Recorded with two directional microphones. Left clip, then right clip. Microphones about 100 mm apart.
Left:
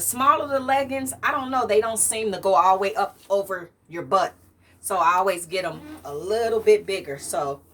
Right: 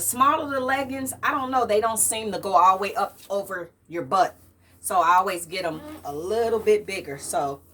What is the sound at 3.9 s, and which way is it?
A woman's voice, 20° left (ahead or behind).